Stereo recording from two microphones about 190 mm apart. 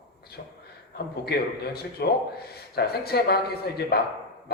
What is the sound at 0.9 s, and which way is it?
A woman's voice, 55° left (ahead or behind).